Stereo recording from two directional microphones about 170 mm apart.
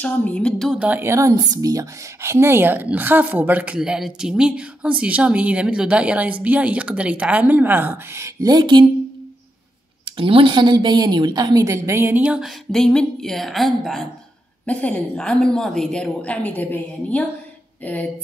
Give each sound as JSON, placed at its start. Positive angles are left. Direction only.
{"t": 0.0, "sound": "speech", "side_deg": 10}
{"t": 10.0, "sound": "a woman's voice", "side_deg": -30}